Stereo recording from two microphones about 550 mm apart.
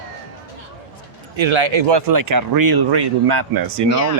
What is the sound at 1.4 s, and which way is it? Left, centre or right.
A man's voice, right.